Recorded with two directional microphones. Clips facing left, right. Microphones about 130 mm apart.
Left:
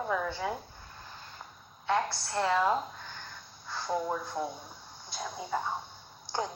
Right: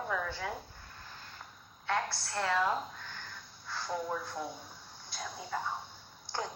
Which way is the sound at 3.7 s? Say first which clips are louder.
Left 2 dB; 20° left (ahead or behind).